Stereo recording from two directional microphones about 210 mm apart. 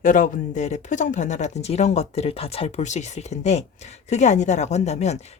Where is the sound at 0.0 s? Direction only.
40° left (ahead or behind).